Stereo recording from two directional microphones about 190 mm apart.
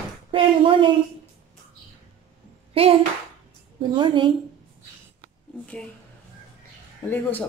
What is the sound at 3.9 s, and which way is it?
Speech, 25° right (ahead or behind).